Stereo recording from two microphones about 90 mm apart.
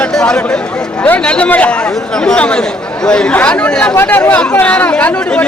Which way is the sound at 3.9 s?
25° left (ahead or behind).